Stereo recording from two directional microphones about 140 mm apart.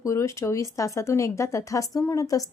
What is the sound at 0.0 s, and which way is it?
A woman's voice, 20° left (ahead or behind).